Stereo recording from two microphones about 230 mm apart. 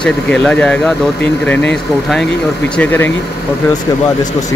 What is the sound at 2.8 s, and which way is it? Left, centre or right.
Speech, centre.